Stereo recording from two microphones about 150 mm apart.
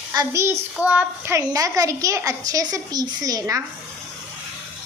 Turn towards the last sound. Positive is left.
turn(degrees=-25)  # may be behind; listen again after turning